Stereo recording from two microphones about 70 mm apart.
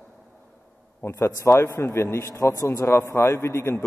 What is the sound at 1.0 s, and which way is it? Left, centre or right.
A man's voice, left.